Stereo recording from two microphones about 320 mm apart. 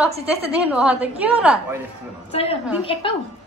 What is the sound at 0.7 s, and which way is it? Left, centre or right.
A woman's voice, centre.